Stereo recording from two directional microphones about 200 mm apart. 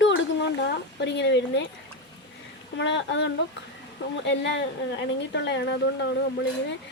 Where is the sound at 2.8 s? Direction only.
65° left (ahead or behind).